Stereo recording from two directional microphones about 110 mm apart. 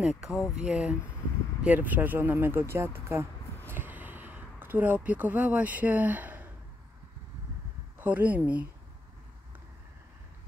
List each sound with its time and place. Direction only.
0.0 s speech: 5° right (ahead or behind)
8.0 s speech: 15° right (ahead or behind)